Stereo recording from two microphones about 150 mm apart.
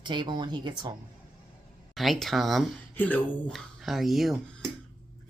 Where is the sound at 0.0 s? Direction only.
30° right (ahead or behind).